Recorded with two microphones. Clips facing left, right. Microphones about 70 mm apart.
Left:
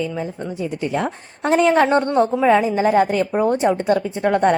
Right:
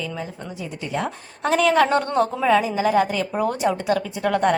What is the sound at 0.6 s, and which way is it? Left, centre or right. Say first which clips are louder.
Speech: left 4 dB; left.